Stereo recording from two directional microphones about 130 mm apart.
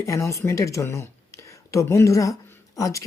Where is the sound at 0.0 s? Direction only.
20° left (ahead or behind).